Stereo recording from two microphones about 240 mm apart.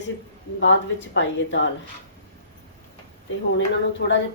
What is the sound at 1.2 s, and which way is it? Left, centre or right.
Speech, left.